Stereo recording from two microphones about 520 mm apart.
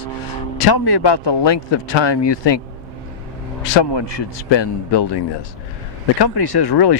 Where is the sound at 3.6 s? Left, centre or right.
Left.